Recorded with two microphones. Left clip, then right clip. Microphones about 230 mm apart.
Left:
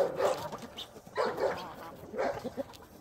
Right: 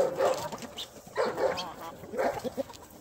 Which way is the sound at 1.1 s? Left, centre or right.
Centre.